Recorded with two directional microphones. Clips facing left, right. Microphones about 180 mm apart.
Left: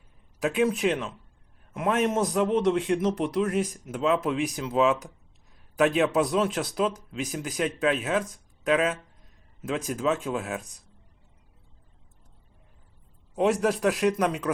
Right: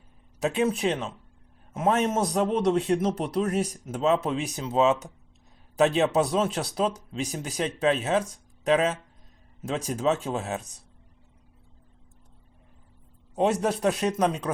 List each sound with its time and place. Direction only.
0.4 s speech: 30° right (ahead or behind)
1.7 s a man's voice: 40° right (ahead or behind)
2.0 s speech: 25° right (ahead or behind)
2.9 s speech: 40° right (ahead or behind)
13.3 s speech: 25° right (ahead or behind)